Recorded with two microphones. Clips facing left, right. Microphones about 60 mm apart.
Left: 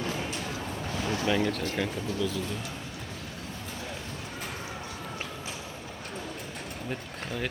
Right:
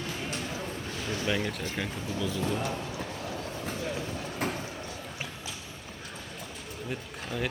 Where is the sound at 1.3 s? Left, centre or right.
Centre.